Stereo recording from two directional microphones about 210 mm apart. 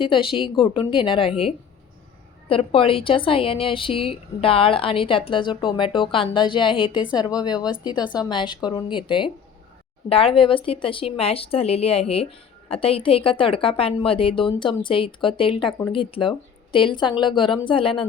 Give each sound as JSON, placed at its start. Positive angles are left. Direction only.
{"t": 0.0, "sound": "a woman's voice", "side_deg": 25}